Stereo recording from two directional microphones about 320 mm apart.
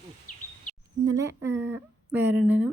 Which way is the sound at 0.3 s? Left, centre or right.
Left.